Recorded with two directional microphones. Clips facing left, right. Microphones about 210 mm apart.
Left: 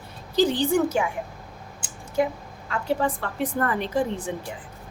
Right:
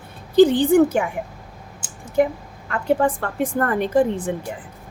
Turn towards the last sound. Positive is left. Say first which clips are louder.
# right 7 dB
turn(degrees=-50)  # may be behind; listen again after turning